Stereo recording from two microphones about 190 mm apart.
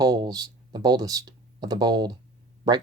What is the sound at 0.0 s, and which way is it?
Speech, 20° right (ahead or behind).